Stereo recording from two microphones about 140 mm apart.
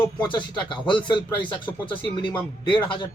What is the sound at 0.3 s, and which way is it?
Speech, 35° left (ahead or behind).